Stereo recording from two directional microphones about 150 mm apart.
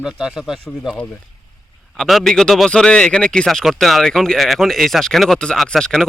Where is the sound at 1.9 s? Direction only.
Centre (ahead or behind).